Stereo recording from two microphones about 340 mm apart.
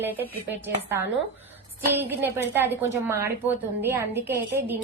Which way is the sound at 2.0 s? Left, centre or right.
Centre.